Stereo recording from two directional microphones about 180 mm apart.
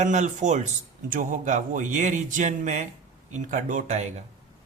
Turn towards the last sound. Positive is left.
turn(degrees=-40)  # may be behind; listen again after turning